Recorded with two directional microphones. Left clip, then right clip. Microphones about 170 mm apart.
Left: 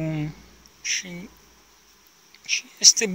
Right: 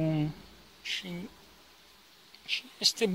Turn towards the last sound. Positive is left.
turn(degrees=-15)  # may be behind; listen again after turning